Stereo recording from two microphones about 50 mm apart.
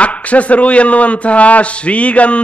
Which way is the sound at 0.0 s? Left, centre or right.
Left.